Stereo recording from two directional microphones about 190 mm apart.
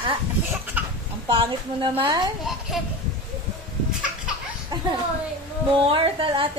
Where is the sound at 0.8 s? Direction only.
10° right (ahead or behind).